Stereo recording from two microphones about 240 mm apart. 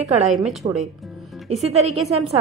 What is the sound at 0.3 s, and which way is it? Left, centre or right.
Speech, centre.